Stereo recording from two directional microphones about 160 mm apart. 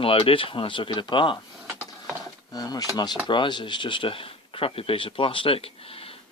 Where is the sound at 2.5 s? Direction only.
25° left (ahead or behind).